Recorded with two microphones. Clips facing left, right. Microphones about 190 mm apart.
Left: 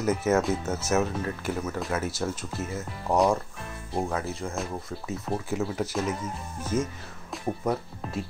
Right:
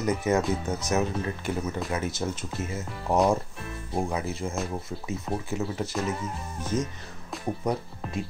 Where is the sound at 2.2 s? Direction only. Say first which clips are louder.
Left 1 dB; 10° right (ahead or behind).